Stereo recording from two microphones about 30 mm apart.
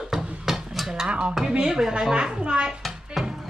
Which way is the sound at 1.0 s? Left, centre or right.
Right.